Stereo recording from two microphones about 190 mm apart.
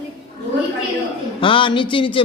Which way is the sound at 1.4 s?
25° left (ahead or behind).